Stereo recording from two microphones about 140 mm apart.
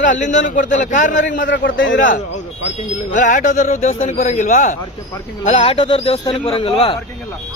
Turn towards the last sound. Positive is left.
turn(degrees=40)  # may be behind; listen again after turning